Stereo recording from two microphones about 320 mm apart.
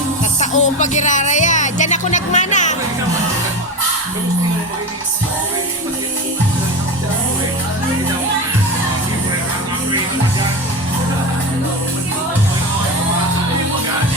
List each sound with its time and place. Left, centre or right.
0.3 s speech: left